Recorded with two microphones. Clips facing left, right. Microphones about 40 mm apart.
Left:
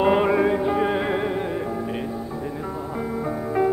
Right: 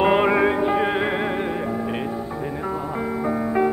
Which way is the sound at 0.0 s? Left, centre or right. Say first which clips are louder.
Right 1 dB; right.